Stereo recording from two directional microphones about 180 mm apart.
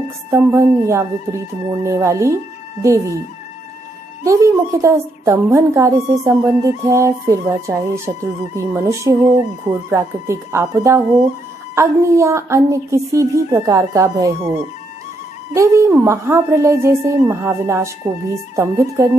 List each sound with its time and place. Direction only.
0.3 s a woman's voice: 15° right (ahead or behind)
4.2 s a woman's voice: 15° right (ahead or behind)
15.5 s a woman's voice: 15° right (ahead or behind)